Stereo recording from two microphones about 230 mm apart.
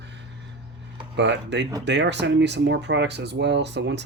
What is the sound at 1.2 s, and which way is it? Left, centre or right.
Speech, right.